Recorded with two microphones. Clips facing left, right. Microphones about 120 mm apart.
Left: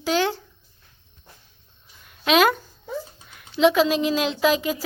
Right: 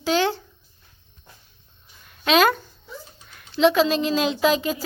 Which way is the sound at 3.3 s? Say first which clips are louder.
Even; 5° left (ahead or behind).